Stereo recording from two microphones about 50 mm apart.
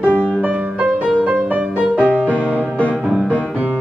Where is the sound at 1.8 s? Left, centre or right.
Right.